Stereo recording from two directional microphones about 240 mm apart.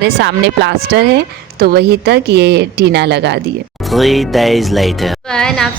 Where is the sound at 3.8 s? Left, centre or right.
Centre.